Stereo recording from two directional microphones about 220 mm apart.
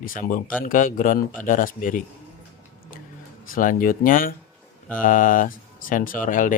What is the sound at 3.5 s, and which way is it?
Speech, 40° left (ahead or behind).